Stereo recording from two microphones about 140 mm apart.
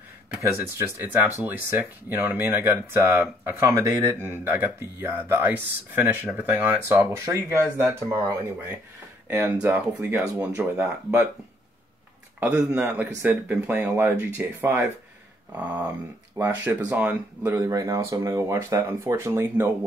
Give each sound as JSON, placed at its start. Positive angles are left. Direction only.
{"t": 0.4, "sound": "speech", "side_deg": -20}
{"t": 9.3, "sound": "speech", "side_deg": -15}
{"t": 12.4, "sound": "speech", "side_deg": -15}